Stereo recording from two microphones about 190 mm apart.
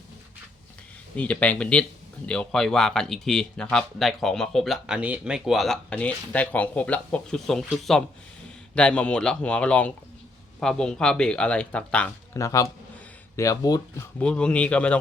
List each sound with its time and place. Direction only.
1.1 s speech: 5° left (ahead or behind)
14.2 s speech: 5° left (ahead or behind)